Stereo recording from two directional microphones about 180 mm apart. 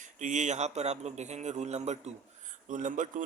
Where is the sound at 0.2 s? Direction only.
45° right (ahead or behind).